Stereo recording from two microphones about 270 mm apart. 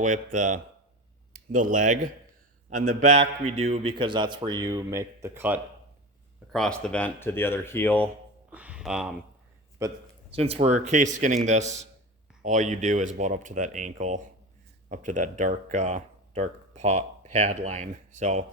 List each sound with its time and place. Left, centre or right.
0.3 s a man's voice: right; by 8.1 s centre
8.4 s a sound: centre
9.7 s speech: centre